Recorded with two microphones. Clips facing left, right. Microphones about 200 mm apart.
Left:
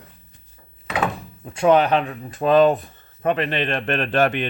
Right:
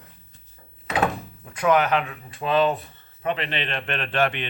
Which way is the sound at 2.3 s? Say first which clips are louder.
Left 7 dB; 45° left (ahead or behind).